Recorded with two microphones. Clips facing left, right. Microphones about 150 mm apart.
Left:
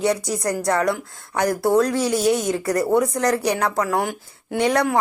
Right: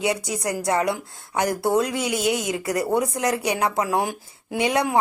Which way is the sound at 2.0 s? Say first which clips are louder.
Left 4 dB; 35° left (ahead or behind).